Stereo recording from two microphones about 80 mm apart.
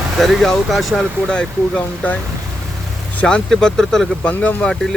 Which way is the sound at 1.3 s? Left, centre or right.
Centre.